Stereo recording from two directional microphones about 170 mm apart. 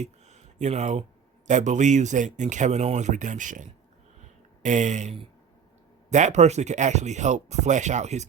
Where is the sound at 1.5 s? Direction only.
45° right (ahead or behind).